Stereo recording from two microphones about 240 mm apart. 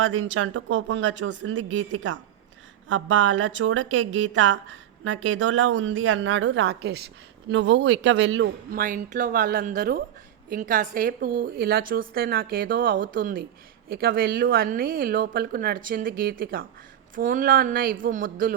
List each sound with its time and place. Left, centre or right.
0.0 s a woman's voice: right
8.8 s a woman's voice: right